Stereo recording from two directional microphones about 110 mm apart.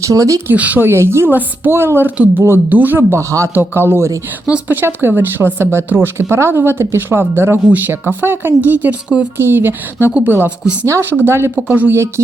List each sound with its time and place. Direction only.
0.0 s speech: 30° right (ahead or behind)
0.5 s speech: 15° right (ahead or behind)